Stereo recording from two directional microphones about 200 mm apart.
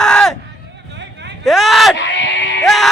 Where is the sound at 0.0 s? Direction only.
5° left (ahead or behind).